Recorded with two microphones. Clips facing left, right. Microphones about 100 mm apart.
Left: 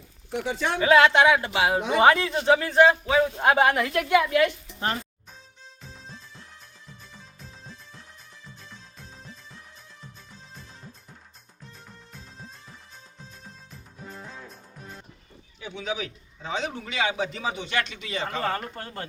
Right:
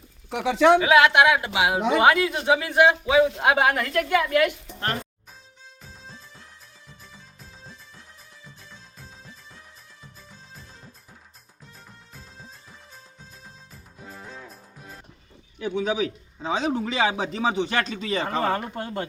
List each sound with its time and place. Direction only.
0.3 s speech: 90° right
0.8 s a woman's voice: 10° right (ahead or behind)
4.4 s speech: 10° right (ahead or behind)
5.8 s music: centre (ahead or behind)
8.7 s music: centre (ahead or behind)
15.5 s speech: 45° right (ahead or behind)
16.4 s speech: 30° right (ahead or behind)
18.4 s speech: 15° right (ahead or behind)